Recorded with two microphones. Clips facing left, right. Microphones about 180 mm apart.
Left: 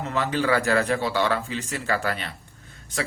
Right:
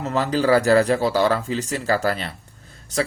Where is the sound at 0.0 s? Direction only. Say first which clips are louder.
Right 4 dB; 35° right (ahead or behind).